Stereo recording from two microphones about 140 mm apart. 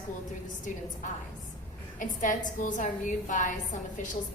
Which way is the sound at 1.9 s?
70° left (ahead or behind).